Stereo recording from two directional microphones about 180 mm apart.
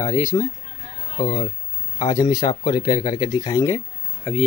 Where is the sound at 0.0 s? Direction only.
20° left (ahead or behind).